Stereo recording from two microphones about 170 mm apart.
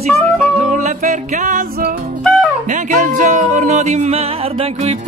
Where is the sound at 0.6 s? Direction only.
45° right (ahead or behind).